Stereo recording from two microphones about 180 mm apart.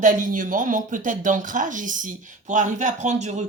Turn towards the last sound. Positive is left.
turn(degrees=-40)  # may be behind; listen again after turning